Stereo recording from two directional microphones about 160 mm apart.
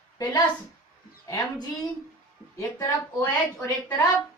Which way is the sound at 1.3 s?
20° left (ahead or behind).